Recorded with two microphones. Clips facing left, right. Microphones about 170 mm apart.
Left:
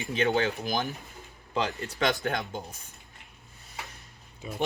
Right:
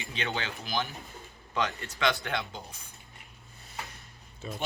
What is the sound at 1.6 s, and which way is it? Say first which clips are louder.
Speech: left 2 dB; 35° left (ahead or behind).